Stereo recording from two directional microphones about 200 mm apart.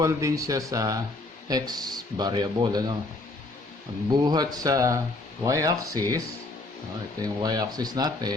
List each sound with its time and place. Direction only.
0.0 s speech: 15° right (ahead or behind)
4.3 s speech: 20° right (ahead or behind)